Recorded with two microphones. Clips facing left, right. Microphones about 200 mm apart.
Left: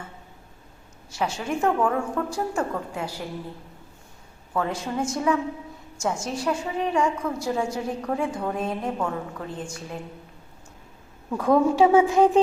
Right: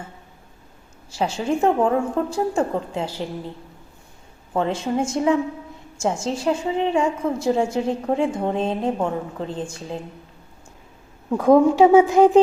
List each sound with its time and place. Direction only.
1.1 s a woman's voice: 30° right (ahead or behind)
4.5 s a woman's voice: 25° right (ahead or behind)
11.3 s a woman's voice: 30° right (ahead or behind)